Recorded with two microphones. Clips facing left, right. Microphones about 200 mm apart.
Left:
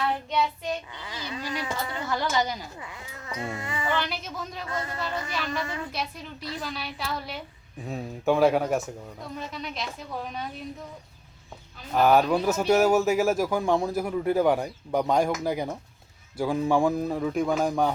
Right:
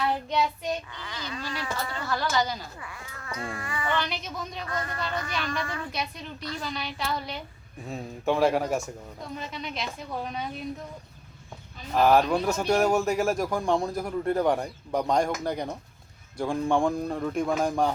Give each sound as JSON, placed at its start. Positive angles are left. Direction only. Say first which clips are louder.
{"t": 0.9, "sound": "speech", "louder": "left 1 dB", "side_deg": 20}
{"t": 3.9, "sound": "a man's voice", "louder": "even", "side_deg": 5}
{"t": 4.7, "sound": "speech", "louder": "left 1 dB", "side_deg": 25}
{"t": 4.9, "sound": "a man's voice", "louder": "even", "side_deg": 5}
{"t": 5.5, "sound": "speech", "louder": "left 1 dB", "side_deg": 20}
{"t": 5.9, "sound": "a man's voice", "louder": "even", "side_deg": 5}
{"t": 11.9, "sound": "a man's voice", "louder": "left 1 dB", "side_deg": 0}